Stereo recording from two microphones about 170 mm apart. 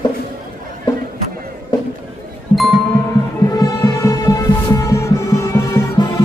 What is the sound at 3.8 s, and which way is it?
Music, 15° left (ahead or behind).